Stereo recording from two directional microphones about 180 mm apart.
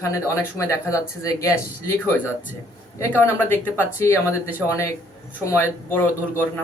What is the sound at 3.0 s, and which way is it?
Speech, 10° left (ahead or behind).